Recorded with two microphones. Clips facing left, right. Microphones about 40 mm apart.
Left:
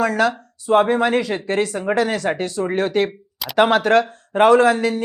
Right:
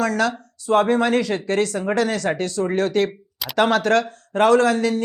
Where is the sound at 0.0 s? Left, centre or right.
Centre.